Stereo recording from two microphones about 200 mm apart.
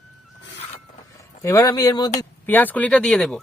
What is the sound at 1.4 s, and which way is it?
Speech, 15° left (ahead or behind).